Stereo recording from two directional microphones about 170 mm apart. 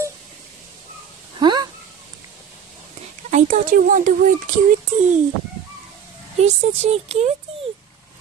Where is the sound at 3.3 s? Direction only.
45° right (ahead or behind).